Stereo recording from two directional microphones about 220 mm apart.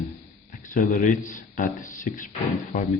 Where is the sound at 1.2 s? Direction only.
35° left (ahead or behind).